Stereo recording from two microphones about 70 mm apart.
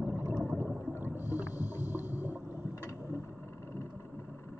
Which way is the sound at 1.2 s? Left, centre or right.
Left.